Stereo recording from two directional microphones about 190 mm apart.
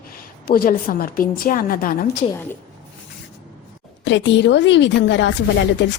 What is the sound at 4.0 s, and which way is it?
Speech, 70° left (ahead or behind).